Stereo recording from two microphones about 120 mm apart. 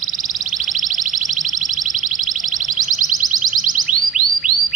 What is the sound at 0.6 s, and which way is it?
Music, 90° right.